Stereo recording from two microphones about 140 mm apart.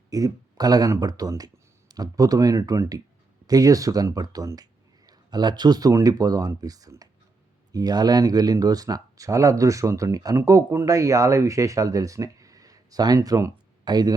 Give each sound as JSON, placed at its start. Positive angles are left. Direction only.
{"t": 0.1, "sound": "speech", "side_deg": -25}